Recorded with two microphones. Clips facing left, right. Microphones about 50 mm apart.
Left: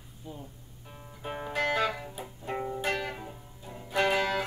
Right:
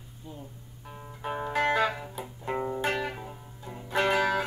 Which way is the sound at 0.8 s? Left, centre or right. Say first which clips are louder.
Right 4 dB; centre.